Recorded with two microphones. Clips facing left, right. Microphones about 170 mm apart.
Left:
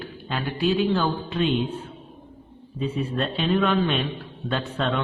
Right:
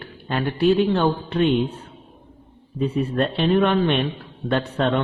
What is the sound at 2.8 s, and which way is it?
A man's voice, 50° right (ahead or behind).